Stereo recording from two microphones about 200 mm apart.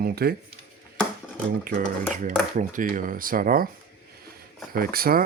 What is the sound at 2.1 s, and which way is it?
Speech, 40° right (ahead or behind).